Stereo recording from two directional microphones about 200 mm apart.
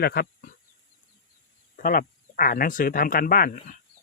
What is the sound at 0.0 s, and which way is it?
Speech, 50° left (ahead or behind).